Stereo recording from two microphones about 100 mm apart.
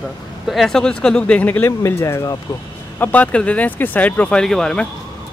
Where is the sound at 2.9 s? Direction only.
15° left (ahead or behind).